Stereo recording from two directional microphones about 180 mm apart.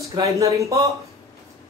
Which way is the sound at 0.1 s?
15° right (ahead or behind).